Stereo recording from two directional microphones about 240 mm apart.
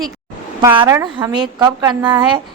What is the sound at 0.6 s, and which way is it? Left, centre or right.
Speech, centre.